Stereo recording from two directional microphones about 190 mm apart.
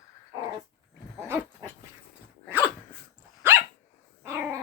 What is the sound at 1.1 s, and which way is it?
Dog, 15° right (ahead or behind).